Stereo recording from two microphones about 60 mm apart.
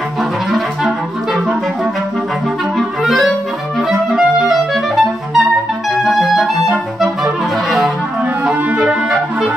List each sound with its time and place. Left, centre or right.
3.0 s music: centre
3.9 s clarinet: centre
8.5 s clarinet: centre